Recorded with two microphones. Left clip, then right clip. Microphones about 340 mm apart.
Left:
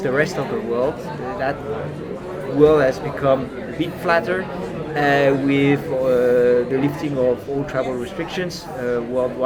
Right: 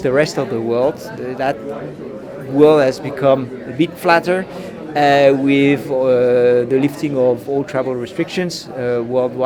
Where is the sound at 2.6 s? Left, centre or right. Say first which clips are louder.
Right 3 dB; right.